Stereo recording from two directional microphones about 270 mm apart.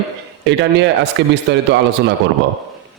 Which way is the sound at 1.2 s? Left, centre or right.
Right.